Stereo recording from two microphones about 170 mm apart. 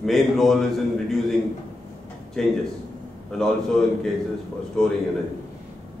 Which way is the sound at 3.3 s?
Centre (ahead or behind).